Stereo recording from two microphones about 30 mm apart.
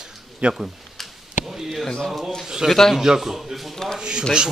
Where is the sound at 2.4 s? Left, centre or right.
Centre.